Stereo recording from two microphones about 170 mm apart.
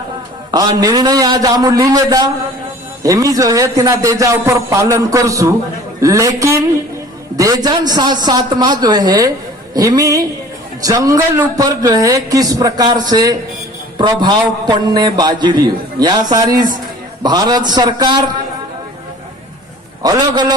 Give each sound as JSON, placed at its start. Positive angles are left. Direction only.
{"t": 0.5, "sound": "a man's voice", "side_deg": -25}
{"t": 20.0, "sound": "a man's voice", "side_deg": -25}